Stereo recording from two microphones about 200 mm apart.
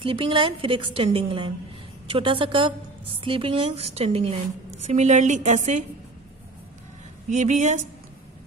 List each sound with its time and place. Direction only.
0.0 s a woman's voice: 25° right (ahead or behind)
7.2 s a woman's voice: 35° right (ahead or behind)